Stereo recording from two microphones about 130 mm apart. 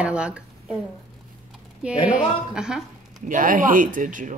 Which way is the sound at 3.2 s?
90° right.